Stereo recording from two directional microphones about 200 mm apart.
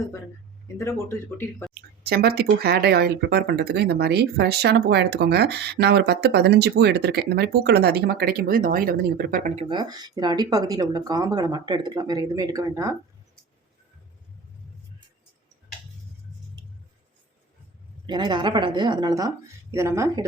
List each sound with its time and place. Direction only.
0.8 s speech: 15° left (ahead or behind)
1.7 s speech: 50° right (ahead or behind)
9.6 s speech: 25° right (ahead or behind)
18.0 s speech: 20° right (ahead or behind)